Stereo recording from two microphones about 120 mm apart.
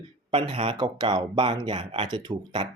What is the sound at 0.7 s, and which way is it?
Speech, 35° right (ahead or behind).